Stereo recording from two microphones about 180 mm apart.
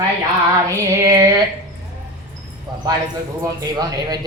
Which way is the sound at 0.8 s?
20° right (ahead or behind).